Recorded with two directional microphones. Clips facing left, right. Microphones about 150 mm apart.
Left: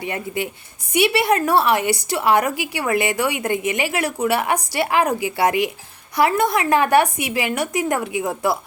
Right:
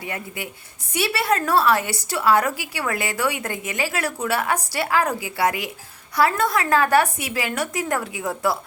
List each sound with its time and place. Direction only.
0.0 s a woman's voice: 25° left (ahead or behind)